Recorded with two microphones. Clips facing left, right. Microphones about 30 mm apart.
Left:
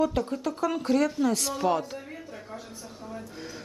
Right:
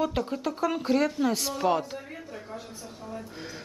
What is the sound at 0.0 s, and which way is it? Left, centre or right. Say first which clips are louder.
A woman's voice: left 2 dB; centre.